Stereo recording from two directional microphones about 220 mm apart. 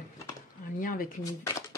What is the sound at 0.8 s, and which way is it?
Speech, 40° left (ahead or behind).